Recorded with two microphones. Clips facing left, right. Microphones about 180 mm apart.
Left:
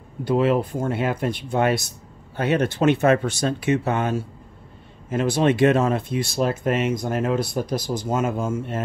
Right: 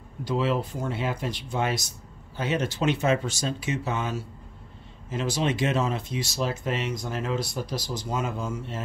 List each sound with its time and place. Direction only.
0.2 s speech: 55° left (ahead or behind)